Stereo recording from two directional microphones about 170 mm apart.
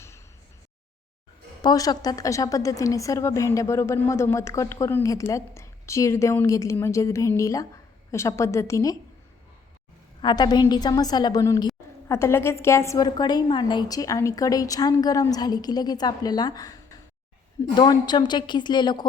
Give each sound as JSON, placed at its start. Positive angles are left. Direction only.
{"t": 1.6, "sound": "a woman's voice", "side_deg": 20}
{"t": 10.2, "sound": "a woman's voice", "side_deg": 25}